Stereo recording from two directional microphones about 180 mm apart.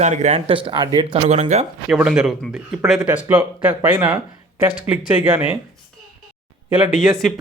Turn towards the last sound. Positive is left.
turn(degrees=-5)  # may be behind; listen again after turning